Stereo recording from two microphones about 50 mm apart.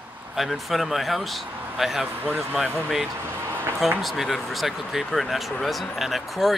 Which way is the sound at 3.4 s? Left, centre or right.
Right.